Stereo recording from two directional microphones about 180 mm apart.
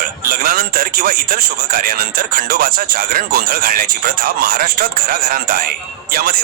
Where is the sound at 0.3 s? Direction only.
55° right (ahead or behind).